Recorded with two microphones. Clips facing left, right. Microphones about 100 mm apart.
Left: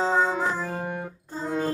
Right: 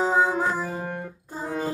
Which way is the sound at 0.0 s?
15° right (ahead or behind).